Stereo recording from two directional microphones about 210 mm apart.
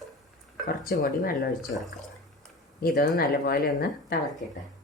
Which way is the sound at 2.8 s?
45° left (ahead or behind).